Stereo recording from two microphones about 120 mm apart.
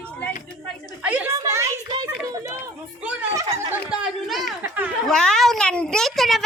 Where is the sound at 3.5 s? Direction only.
25° right (ahead or behind).